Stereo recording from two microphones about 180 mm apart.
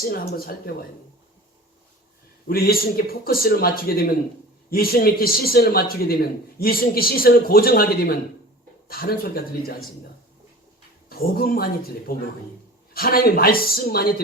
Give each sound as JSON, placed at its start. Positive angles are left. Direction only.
{"t": 0.1, "sound": "speech", "side_deg": 55}
{"t": 2.5, "sound": "speech", "side_deg": 55}
{"t": 11.1, "sound": "speech", "side_deg": 55}